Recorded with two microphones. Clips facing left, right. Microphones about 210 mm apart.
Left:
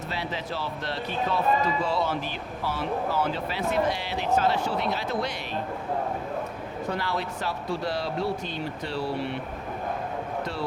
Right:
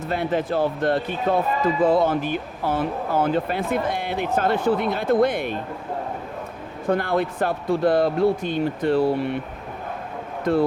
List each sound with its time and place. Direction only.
0.1 s speech: 50° right (ahead or behind)
6.9 s speech: 50° right (ahead or behind)
10.4 s speech: 50° right (ahead or behind)